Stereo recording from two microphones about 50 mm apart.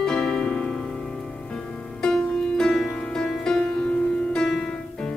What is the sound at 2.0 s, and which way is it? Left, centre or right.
Music, centre.